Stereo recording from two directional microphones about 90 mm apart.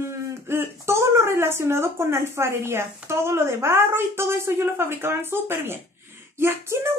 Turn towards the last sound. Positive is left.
turn(degrees=-25)  # may be behind; listen again after turning